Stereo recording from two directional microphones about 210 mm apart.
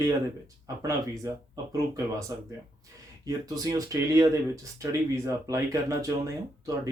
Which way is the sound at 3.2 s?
15° right (ahead or behind).